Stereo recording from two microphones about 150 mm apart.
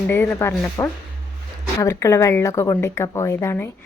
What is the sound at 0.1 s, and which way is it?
A woman's voice, 15° left (ahead or behind).